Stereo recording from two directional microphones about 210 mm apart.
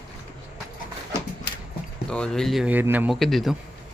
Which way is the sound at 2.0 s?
5° left (ahead or behind).